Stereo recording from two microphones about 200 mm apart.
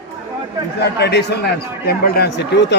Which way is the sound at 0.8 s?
55° left (ahead or behind).